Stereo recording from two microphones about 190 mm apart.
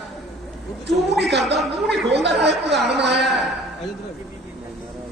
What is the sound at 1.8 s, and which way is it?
Speech, 65° right (ahead or behind).